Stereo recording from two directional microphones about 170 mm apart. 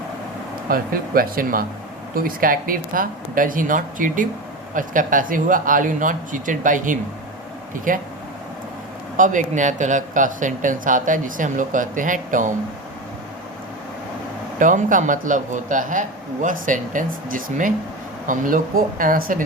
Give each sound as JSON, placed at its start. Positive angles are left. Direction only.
{"t": 0.7, "sound": "speech", "side_deg": -60}
{"t": 9.1, "sound": "speech", "side_deg": -50}
{"t": 14.6, "sound": "speech", "side_deg": -50}